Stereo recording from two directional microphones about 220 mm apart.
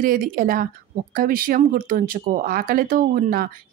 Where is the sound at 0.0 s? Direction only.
40° right (ahead or behind).